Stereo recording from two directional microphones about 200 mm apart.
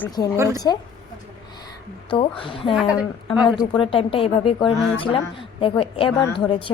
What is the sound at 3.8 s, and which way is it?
A woman's voice, 25° left (ahead or behind).